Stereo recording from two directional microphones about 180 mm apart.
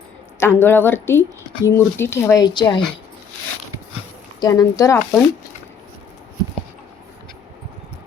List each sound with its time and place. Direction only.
0.3 s speech: 15° left (ahead or behind)
4.4 s speech: 20° left (ahead or behind)